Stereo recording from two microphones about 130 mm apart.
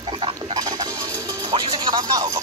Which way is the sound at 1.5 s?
35° right (ahead or behind).